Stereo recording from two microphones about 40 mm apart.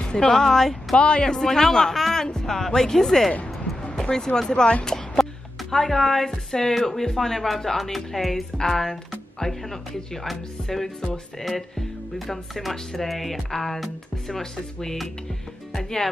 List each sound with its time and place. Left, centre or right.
0.0 s speech: centre
0.9 s a man's voice: left
1.3 s a woman's voice: centre
12.3 s speech: centre